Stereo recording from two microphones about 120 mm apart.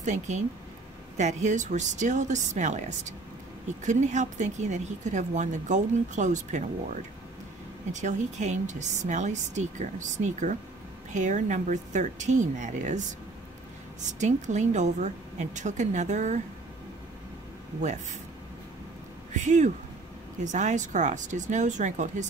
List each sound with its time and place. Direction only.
0.0 s a woman's voice: 75° right (ahead or behind)
7.9 s a woman's voice: 90° right
14.2 s a woman's voice: 80° right
19.3 s speech: 90° right